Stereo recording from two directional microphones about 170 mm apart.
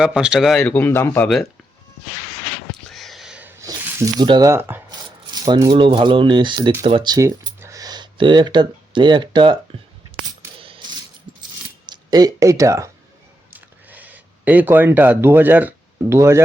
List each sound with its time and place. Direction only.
0.0 s speech: 5° right (ahead or behind); by 1.3 s 15° left (ahead or behind)
2.9 s a sound: centre (ahead or behind)
3.6 s speech: 20° right (ahead or behind)
4.9 s speech: 25° right (ahead or behind)
10.6 s mechanisms: 30° right (ahead or behind)
11.9 s speech: 25° right (ahead or behind)
13.5 s a sound: 10° right (ahead or behind)